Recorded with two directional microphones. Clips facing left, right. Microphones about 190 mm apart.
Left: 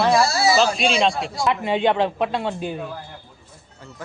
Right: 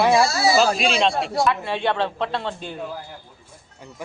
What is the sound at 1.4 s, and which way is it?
Speech, 15° left (ahead or behind).